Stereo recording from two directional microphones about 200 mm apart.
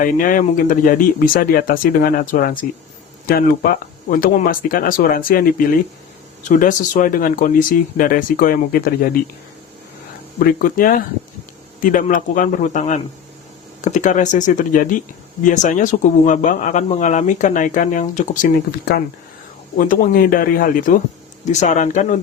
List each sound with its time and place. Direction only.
0.0 s speech: 45° left (ahead or behind)
10.4 s speech: 45° left (ahead or behind)